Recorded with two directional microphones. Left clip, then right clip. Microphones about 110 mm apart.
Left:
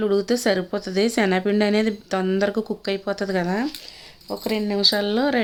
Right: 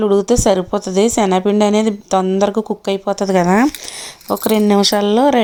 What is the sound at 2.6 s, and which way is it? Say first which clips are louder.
Speech: right 7 dB; 25° right (ahead or behind).